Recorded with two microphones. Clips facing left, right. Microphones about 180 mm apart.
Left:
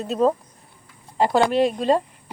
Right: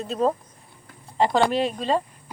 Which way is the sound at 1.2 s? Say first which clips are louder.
Left 2 dB; 10° left (ahead or behind).